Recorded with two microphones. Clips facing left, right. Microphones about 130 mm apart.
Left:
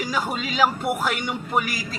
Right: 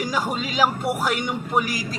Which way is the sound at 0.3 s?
40° right (ahead or behind).